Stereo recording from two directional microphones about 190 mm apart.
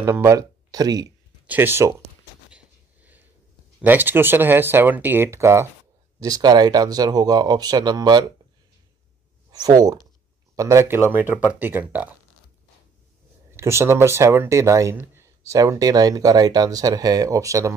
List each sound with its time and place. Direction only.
0.0 s speech: 15° right (ahead or behind)
2.5 s a sound: 10° right (ahead or behind)
3.8 s speech: 10° right (ahead or behind)
9.5 s speech: 20° right (ahead or behind)
13.6 s speech: 15° right (ahead or behind)